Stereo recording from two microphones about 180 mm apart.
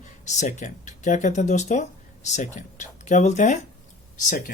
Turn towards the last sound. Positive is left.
turn(degrees=45)  # may be behind; listen again after turning